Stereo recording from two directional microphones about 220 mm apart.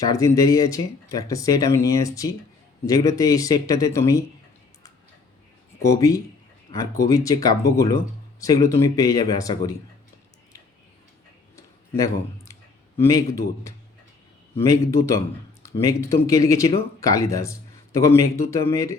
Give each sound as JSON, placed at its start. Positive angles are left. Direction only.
{"t": 0.1, "sound": "speech", "side_deg": 15}
{"t": 5.8, "sound": "speech", "side_deg": 15}
{"t": 13.0, "sound": "speech", "side_deg": 15}